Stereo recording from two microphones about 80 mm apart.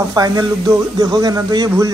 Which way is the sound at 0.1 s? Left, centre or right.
Right.